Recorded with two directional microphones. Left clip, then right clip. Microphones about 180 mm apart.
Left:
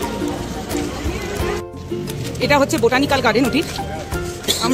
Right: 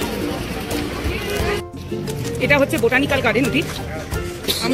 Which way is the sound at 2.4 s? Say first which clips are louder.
Left 1 dB; 20° left (ahead or behind).